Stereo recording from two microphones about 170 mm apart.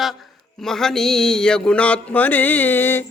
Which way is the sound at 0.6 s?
5° left (ahead or behind).